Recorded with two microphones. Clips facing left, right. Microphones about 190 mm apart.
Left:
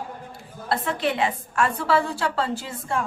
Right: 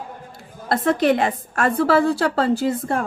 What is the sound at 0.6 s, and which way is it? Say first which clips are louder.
A woman's voice: right 7 dB; 45° right (ahead or behind).